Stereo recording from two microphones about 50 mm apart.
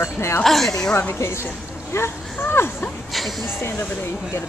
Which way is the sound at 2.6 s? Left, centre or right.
Left.